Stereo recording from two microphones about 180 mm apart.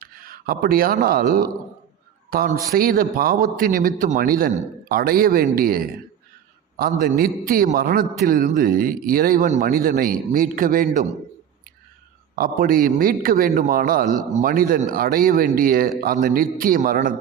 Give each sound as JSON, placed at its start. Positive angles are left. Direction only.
{"t": 0.0, "sound": "a man's voice", "side_deg": -55}
{"t": 7.0, "sound": "a man's voice", "side_deg": -50}
{"t": 12.4, "sound": "a man's voice", "side_deg": -55}